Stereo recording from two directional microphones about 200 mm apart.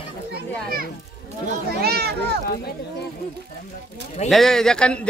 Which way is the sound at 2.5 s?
50° left (ahead or behind).